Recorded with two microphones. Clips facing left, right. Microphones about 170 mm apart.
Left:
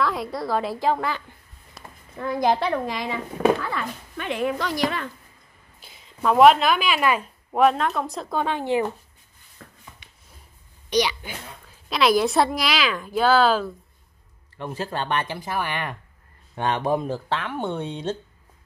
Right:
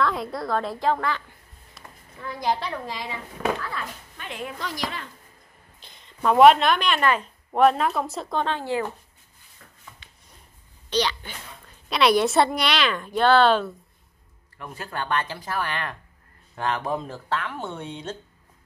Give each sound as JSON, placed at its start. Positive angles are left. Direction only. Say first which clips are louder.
{"t": 0.0, "sound": "a woman's voice", "louder": "even", "side_deg": 0}
{"t": 2.1, "sound": "a woman's voice", "louder": "left 5 dB", "side_deg": 55}
{"t": 3.4, "sound": "speech", "louder": "left 7 dB", "side_deg": 45}
{"t": 3.7, "sound": "speech", "louder": "left 5 dB", "side_deg": 70}
{"t": 5.8, "sound": "a woman's voice", "louder": "left 1 dB", "side_deg": 5}
{"t": 9.6, "sound": "a sound", "louder": "left 7 dB", "side_deg": 55}
{"t": 10.9, "sound": "speech", "louder": "left 2 dB", "side_deg": 10}
{"t": 11.6, "sound": "a woman's voice", "louder": "even", "side_deg": 0}
{"t": 14.6, "sound": "speech", "louder": "left 4 dB", "side_deg": 25}